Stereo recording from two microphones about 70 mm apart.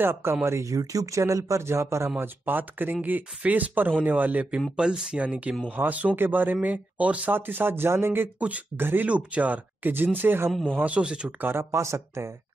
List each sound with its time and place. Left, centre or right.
0.0 s speech: right
4.5 s speech: centre; by 8.3 s right
8.4 s speech: right
10.8 s speech: centre
11.4 s speech: right